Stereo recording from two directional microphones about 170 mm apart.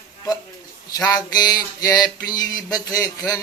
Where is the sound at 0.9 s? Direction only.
25° left (ahead or behind).